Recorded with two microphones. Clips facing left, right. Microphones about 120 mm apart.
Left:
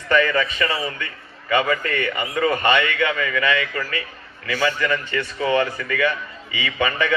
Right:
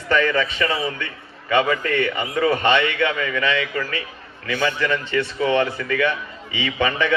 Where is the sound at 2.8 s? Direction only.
20° right (ahead or behind).